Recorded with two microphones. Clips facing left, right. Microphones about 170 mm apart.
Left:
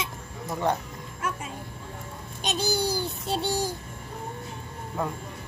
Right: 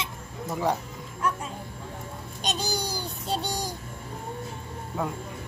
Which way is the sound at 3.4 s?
20° right (ahead or behind).